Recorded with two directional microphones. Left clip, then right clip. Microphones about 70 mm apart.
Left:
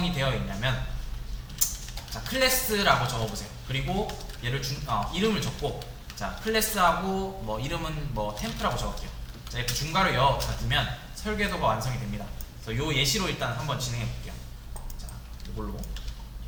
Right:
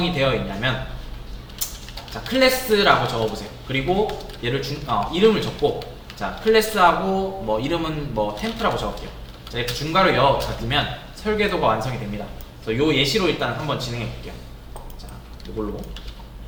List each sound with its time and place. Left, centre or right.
0.0 s speech: left
2.2 s speech: left